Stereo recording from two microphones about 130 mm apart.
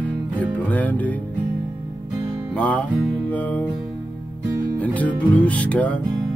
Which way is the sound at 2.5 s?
10° left (ahead or behind).